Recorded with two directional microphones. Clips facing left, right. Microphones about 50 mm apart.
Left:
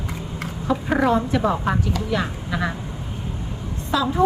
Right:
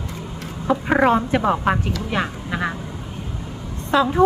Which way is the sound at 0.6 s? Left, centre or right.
Right.